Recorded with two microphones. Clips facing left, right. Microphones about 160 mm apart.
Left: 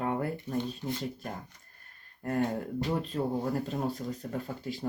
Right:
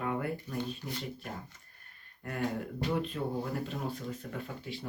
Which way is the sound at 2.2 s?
35° left (ahead or behind).